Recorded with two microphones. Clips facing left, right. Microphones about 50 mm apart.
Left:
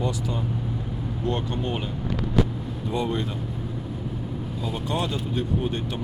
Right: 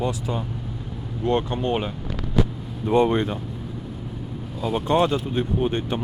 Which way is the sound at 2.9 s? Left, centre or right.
Right.